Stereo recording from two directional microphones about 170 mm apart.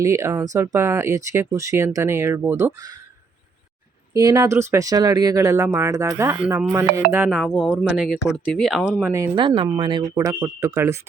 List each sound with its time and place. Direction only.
0.0 s speech: 15° right (ahead or behind)
4.1 s speech: 20° right (ahead or behind)
9.3 s speech: 30° right (ahead or behind)